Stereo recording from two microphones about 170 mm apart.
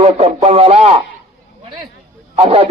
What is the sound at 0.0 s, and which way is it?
Radio, 40° right (ahead or behind).